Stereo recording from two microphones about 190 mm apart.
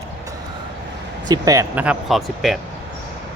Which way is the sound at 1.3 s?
20° right (ahead or behind).